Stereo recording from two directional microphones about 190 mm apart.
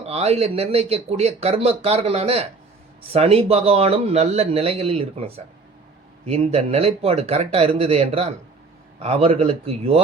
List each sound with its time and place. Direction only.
0.0 s speech: 35° right (ahead or behind)